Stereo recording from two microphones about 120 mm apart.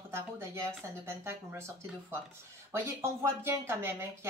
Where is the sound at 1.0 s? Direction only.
20° right (ahead or behind).